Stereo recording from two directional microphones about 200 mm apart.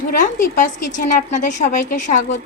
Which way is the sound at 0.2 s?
40° left (ahead or behind).